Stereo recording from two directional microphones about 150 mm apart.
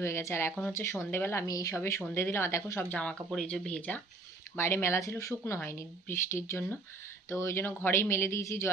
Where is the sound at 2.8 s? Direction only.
5° left (ahead or behind).